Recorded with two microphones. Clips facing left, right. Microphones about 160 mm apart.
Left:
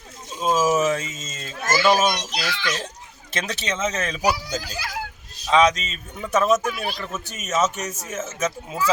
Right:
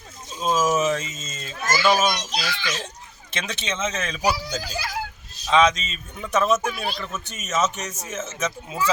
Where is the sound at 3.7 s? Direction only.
10° left (ahead or behind).